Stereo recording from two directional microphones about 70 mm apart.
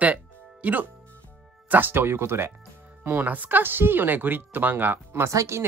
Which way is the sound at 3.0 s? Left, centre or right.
Right.